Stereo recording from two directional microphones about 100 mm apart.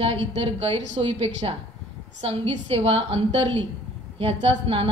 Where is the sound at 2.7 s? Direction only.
90° right; by 4.9 s 70° right (ahead or behind).